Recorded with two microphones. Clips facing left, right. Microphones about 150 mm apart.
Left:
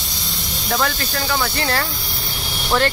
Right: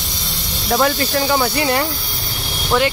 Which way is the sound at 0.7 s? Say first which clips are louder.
Right 5 dB; 25° right (ahead or behind).